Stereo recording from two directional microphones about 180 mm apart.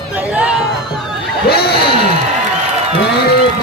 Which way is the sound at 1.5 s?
60° left (ahead or behind).